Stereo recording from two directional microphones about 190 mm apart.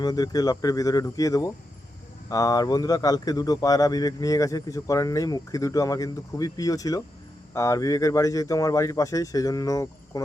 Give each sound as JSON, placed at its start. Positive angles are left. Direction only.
{"t": 0.0, "sound": "speech", "side_deg": 20}